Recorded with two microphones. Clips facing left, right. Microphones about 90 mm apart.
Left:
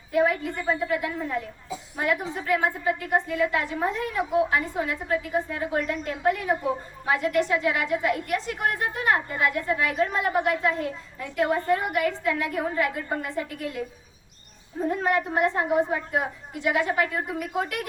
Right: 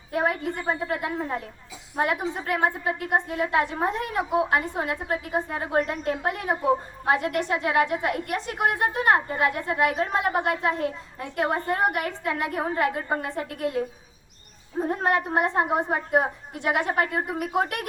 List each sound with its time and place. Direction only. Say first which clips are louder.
0.1 s a sound: left 3 dB; 45° right (ahead or behind)
0.4 s a woman's voice: left 1 dB; 30° right (ahead or behind)
17.3 s a woman's voice: right 3 dB; 50° right (ahead or behind)